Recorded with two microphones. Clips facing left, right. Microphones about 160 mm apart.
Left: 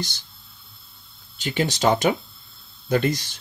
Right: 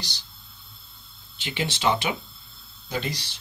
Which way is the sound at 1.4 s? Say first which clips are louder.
Left 5 dB; 45° left (ahead or behind).